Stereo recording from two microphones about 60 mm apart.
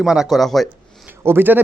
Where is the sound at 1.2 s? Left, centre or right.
Right.